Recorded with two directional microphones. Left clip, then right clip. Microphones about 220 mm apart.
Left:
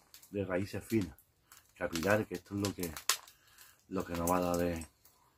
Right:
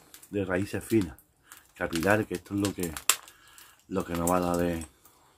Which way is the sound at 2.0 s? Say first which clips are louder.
Right 6 dB; 25° right (ahead or behind).